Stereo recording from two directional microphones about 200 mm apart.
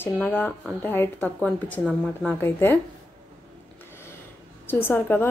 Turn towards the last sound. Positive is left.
turn(degrees=10)  # may be behind; listen again after turning